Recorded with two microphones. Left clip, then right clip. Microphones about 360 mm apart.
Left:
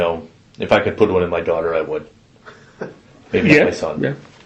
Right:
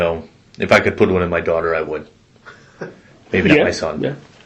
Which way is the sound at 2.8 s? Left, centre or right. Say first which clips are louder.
Left 1 dB; centre.